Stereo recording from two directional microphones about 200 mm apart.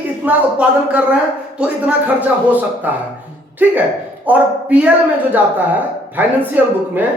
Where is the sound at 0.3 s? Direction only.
5° right (ahead or behind).